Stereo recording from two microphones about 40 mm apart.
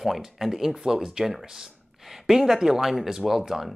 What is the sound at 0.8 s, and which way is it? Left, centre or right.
Speech, centre.